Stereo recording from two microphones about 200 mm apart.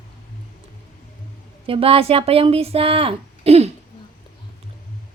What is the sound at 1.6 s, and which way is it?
Speech, 25° right (ahead or behind).